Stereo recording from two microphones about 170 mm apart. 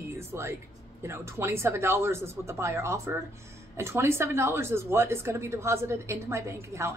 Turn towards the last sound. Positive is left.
turn(degrees=-15)  # may be behind; listen again after turning